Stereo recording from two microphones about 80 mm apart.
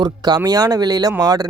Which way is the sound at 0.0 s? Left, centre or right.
Right.